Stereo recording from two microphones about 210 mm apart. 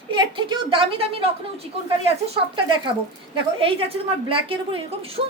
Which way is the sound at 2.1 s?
25° right (ahead or behind).